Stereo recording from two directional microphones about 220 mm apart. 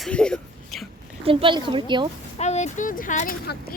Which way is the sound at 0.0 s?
5° left (ahead or behind).